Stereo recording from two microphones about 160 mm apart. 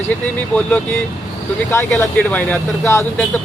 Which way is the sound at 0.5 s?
10° left (ahead or behind).